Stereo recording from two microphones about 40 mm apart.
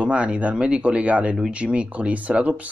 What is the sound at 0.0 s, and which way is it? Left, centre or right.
Speech, right.